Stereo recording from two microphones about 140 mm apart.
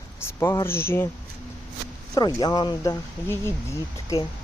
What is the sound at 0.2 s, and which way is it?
Speech, 20° left (ahead or behind).